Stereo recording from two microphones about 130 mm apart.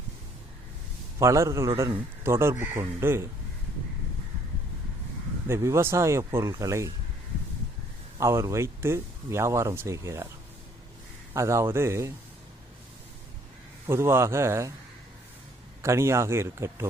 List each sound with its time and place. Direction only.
1.2 s speech: 25° right (ahead or behind)
5.5 s speech: 20° right (ahead or behind)
8.2 s speech: 20° right (ahead or behind)
11.3 s speech: 20° right (ahead or behind)
13.8 s speech: 20° right (ahead or behind)
15.8 s speech: 20° right (ahead or behind)